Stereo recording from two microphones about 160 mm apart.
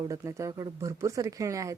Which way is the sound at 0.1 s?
20° right (ahead or behind).